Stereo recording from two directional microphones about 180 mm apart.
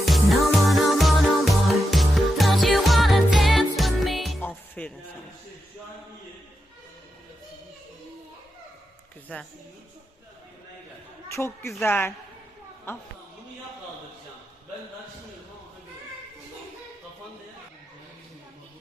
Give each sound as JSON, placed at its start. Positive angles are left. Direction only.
{"t": 0.0, "sound": "music", "side_deg": 0}
{"t": 9.3, "sound": "a woman's voice", "side_deg": 10}
{"t": 11.3, "sound": "a woman's voice", "side_deg": 15}